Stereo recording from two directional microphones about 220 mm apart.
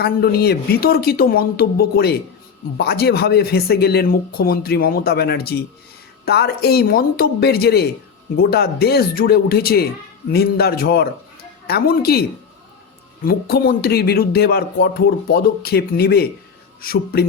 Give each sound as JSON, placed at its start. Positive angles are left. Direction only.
{"t": 0.0, "sound": "speech", "side_deg": 45}
{"t": 13.2, "sound": "speech", "side_deg": 45}